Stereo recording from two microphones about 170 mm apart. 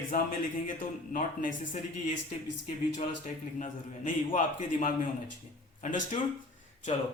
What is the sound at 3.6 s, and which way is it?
Speech, 50° left (ahead or behind).